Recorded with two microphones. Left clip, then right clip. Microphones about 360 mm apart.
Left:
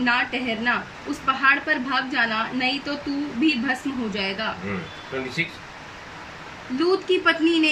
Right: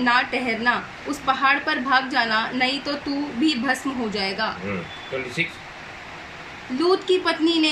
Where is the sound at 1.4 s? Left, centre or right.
Centre.